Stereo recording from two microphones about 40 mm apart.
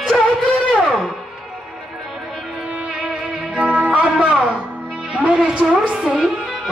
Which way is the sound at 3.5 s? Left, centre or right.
Right.